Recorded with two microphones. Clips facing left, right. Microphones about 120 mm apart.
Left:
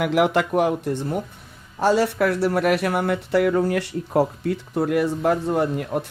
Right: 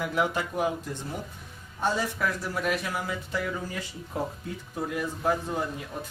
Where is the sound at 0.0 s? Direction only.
75° left (ahead or behind).